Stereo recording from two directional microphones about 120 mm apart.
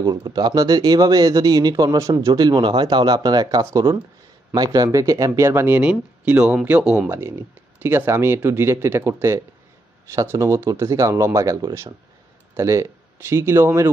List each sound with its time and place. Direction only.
0.0 s speech: 35° right (ahead or behind); by 7.1 s 5° right (ahead or behind)
7.1 s speech: 20° right (ahead or behind)